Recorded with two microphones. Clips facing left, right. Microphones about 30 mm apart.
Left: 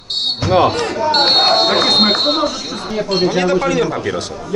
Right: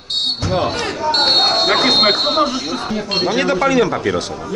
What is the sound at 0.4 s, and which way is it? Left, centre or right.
Speech, centre.